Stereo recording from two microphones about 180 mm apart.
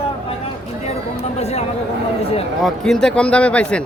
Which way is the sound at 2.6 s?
Centre (ahead or behind).